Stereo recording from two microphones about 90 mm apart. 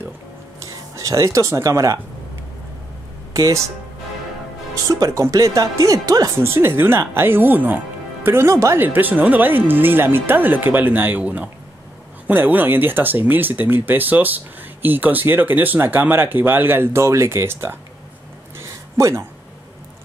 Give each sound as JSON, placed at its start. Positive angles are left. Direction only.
{"t": 0.9, "sound": "speech", "side_deg": -40}
{"t": 4.8, "sound": "speech", "side_deg": -40}
{"t": 6.4, "sound": "speech", "side_deg": -25}
{"t": 8.8, "sound": "speech", "side_deg": -20}
{"t": 18.9, "sound": "speech", "side_deg": -35}